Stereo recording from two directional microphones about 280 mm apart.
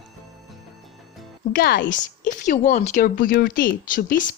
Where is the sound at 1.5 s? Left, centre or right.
Left.